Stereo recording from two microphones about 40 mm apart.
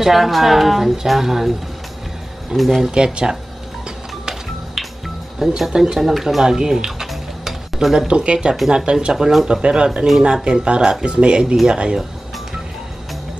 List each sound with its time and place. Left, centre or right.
0.0 s a woman's voice: centre
2.5 s a woman's voice: centre
2.9 s speech: right
5.6 s a woman's voice: centre
7.4 s stir: centre
8.1 s speech: right